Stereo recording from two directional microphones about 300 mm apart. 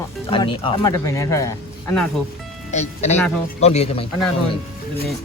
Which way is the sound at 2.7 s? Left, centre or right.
Left.